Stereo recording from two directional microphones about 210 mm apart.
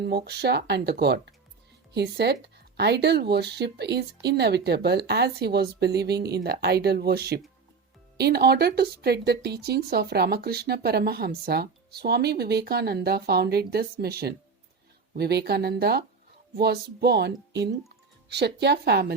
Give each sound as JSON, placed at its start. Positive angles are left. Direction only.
{"t": 0.0, "sound": "speech", "side_deg": -50}